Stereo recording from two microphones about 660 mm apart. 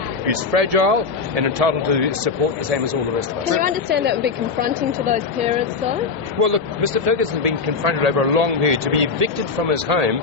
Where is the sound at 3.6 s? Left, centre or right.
Centre.